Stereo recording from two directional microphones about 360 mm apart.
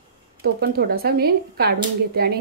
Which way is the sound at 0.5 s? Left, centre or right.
Right.